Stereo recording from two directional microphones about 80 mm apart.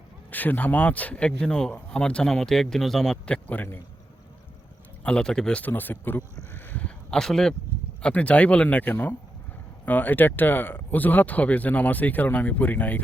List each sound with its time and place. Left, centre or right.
0.3 s speech: left
5.0 s speech: centre
6.5 s a sound: left
7.1 s speech: centre; by 13.0 s left